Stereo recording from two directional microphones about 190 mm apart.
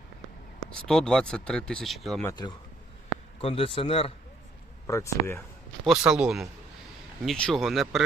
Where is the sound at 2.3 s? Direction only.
20° left (ahead or behind).